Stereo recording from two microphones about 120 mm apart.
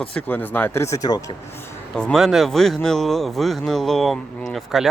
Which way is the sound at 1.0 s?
35° left (ahead or behind).